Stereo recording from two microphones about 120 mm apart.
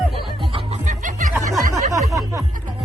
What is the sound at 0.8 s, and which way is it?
Music, 90° right.